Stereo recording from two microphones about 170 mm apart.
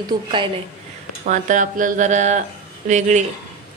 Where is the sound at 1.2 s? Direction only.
45° right (ahead or behind).